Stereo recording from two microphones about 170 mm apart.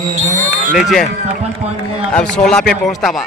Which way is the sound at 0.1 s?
45° right (ahead or behind).